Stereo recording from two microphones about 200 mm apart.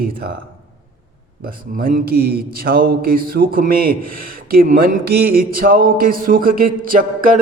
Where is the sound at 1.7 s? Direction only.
45° right (ahead or behind).